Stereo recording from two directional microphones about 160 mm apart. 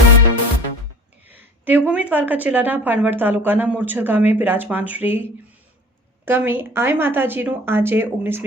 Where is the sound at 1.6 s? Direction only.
10° right (ahead or behind).